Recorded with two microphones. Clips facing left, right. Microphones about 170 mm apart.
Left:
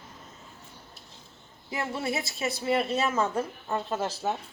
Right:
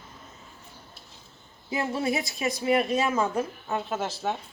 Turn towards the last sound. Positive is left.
turn(degrees=0)  # may be behind; listen again after turning